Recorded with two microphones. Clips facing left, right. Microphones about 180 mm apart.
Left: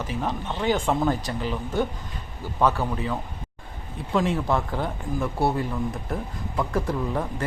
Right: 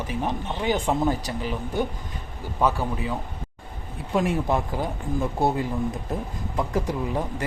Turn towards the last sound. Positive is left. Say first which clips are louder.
# even
turn(degrees=-15)  # may be behind; listen again after turning